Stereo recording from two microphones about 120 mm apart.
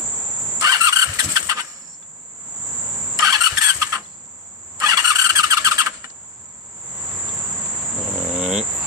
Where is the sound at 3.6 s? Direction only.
30° right (ahead or behind).